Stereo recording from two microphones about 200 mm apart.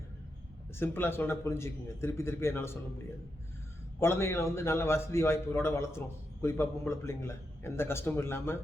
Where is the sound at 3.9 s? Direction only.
15° left (ahead or behind).